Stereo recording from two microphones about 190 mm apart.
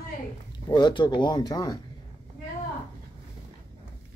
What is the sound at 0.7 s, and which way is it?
Speech, 25° left (ahead or behind).